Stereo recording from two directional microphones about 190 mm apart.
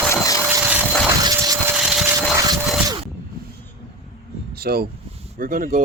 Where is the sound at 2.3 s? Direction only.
20° right (ahead or behind).